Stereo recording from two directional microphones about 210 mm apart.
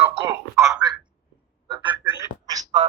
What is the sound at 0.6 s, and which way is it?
Speech, centre (ahead or behind).